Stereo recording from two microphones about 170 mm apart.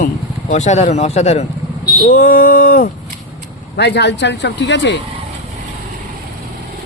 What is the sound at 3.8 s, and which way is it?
Speech, 85° left.